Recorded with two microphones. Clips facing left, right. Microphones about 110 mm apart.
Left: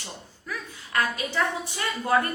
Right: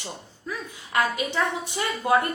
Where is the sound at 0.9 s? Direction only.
20° right (ahead or behind).